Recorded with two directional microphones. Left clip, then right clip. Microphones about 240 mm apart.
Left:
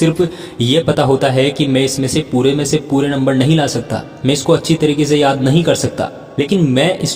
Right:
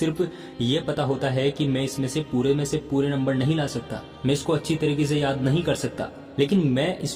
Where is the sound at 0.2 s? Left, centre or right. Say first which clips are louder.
Left 10 dB; left.